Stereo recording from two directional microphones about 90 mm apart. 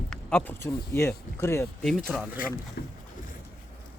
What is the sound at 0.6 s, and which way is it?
Speech, 30° left (ahead or behind).